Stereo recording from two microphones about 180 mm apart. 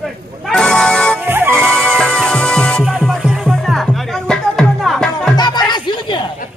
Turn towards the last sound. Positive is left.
turn(degrees=25)  # may be behind; listen again after turning